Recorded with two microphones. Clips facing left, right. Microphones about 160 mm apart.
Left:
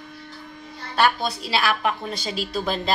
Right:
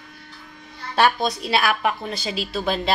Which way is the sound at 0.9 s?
20° right (ahead or behind).